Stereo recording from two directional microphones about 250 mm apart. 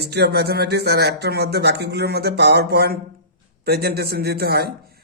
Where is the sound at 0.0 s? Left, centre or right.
Right.